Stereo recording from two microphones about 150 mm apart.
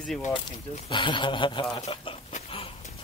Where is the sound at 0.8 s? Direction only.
35° left (ahead or behind).